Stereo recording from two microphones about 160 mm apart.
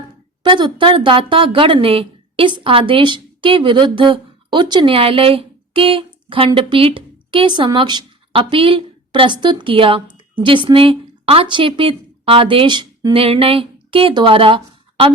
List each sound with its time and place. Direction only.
0.4 s a woman's voice: 30° right (ahead or behind)
13.1 s speech: 35° right (ahead or behind)